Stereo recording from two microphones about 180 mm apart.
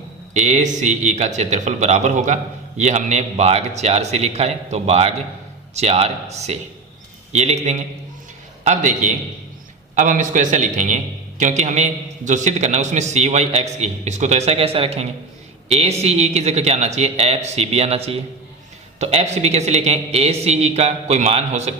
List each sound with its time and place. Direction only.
0.3 s a man's voice: 40° right (ahead or behind)